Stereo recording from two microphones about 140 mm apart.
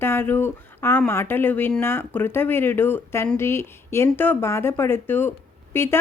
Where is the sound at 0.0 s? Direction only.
15° left (ahead or behind).